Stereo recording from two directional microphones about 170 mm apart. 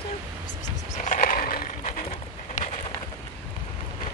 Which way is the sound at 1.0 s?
50° left (ahead or behind).